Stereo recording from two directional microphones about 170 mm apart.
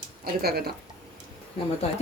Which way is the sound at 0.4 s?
65° right (ahead or behind).